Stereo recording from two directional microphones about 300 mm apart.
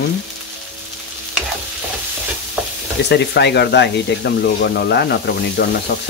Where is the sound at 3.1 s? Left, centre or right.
Left.